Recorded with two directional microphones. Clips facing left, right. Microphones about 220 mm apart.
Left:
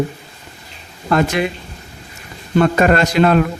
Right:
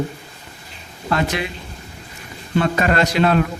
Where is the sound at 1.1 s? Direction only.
50° left (ahead or behind).